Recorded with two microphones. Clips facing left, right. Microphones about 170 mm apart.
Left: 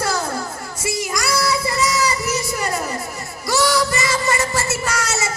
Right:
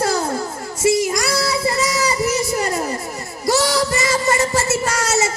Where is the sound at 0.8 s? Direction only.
50° right (ahead or behind).